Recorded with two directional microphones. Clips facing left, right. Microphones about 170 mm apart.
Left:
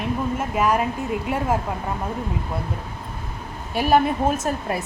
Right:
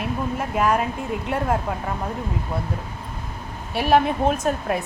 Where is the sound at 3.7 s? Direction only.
Centre (ahead or behind).